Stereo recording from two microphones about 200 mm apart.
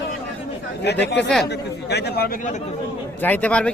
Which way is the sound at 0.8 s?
55° left (ahead or behind).